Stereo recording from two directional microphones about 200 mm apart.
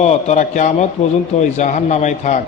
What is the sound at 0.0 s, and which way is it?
A man's voice, 35° left (ahead or behind).